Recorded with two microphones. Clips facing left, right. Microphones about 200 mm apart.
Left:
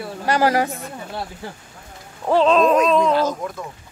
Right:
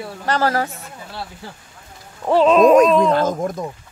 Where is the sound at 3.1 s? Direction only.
50° right (ahead or behind).